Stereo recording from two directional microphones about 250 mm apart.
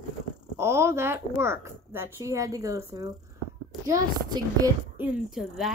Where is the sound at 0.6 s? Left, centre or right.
Centre.